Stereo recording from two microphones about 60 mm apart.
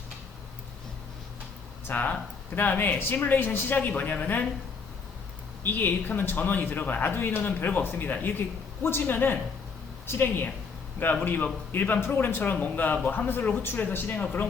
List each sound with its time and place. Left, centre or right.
1.9 s speech: left
5.6 s speech: left
14.1 s speech: left